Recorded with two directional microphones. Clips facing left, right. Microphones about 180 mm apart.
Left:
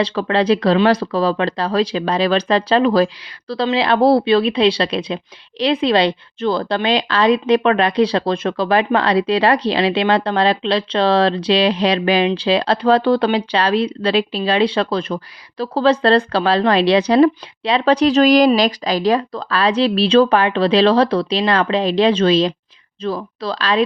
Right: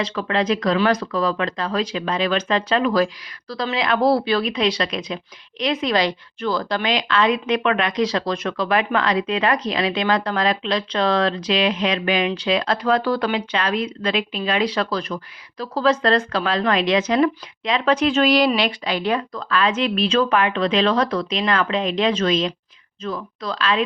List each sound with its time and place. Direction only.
0.0 s speech: 35° left (ahead or behind)